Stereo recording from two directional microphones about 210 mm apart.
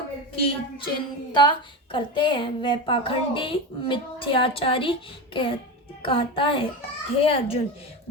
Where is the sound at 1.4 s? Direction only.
20° left (ahead or behind).